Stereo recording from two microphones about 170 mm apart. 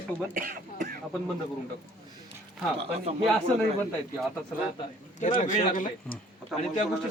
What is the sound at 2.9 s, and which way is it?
Speech, 40° right (ahead or behind).